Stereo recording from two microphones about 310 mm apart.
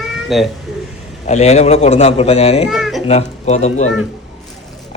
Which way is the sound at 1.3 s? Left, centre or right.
Left.